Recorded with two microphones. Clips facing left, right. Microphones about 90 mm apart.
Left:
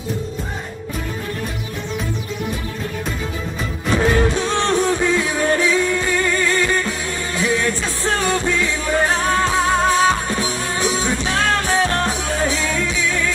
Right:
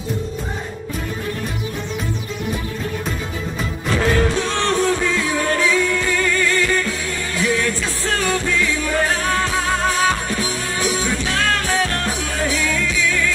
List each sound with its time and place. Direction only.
3.9 s music: 20° left (ahead or behind)